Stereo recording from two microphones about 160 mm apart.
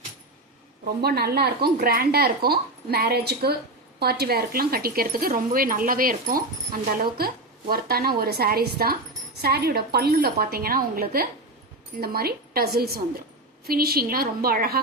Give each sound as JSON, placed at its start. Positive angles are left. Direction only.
{"t": 1.0, "sound": "speech", "side_deg": -80}